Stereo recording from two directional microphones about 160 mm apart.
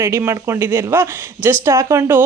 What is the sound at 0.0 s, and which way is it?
A man's voice, 15° right (ahead or behind).